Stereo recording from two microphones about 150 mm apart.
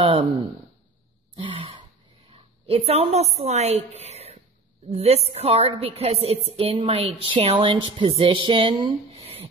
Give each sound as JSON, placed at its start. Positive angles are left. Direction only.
{"t": 0.0, "sound": "speech", "side_deg": -35}
{"t": 1.3, "sound": "throat clearing", "side_deg": -35}
{"t": 2.3, "sound": "a woman's voice", "side_deg": -40}